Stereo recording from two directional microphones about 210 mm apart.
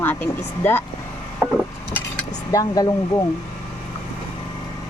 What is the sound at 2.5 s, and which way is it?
Speech, 15° left (ahead or behind).